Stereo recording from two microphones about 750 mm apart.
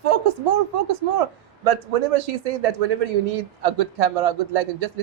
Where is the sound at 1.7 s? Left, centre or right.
Right.